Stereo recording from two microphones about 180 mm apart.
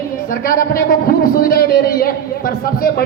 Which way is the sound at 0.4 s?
50° left (ahead or behind).